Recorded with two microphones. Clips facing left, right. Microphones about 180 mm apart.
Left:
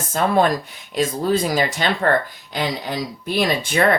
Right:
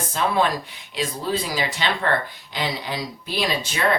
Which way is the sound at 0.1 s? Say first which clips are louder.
Left 5 dB; 45° left (ahead or behind).